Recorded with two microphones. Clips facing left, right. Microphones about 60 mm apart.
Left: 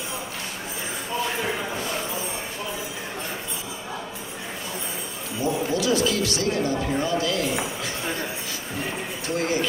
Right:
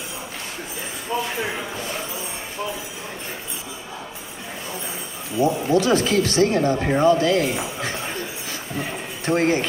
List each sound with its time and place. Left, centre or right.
5.4 s speech: right
9.2 s speech: right